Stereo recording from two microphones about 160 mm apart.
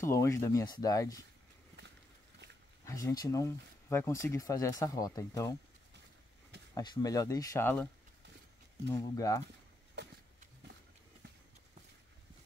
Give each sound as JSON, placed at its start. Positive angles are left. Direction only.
{"t": 0.0, "sound": "speech", "side_deg": 15}
{"t": 2.8, "sound": "speech", "side_deg": 20}
{"t": 6.7, "sound": "speech", "side_deg": 25}
{"t": 8.9, "sound": "speech", "side_deg": 20}
{"t": 10.0, "sound": "a sound", "side_deg": -90}